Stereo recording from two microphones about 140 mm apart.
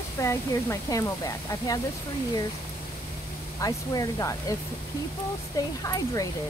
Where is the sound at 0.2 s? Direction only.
20° left (ahead or behind).